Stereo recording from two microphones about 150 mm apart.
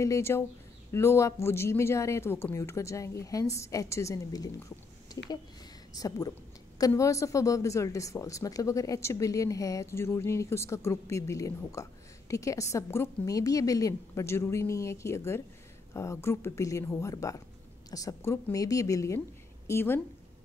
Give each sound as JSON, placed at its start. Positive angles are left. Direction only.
{"t": 0.0, "sound": "speech", "side_deg": 20}